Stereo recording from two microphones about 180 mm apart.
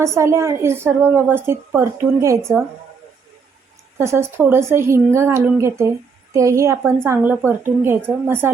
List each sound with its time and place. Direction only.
0.0 s a woman's voice: 15° right (ahead or behind)
3.9 s a woman's voice: 15° right (ahead or behind)